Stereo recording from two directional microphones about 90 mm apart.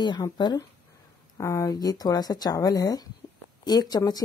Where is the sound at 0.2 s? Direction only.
45° left (ahead or behind).